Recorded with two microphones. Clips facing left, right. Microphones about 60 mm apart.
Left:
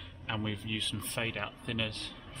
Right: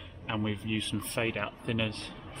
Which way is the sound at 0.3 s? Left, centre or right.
Centre.